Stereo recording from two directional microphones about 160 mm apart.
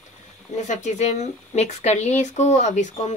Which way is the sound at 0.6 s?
45° left (ahead or behind).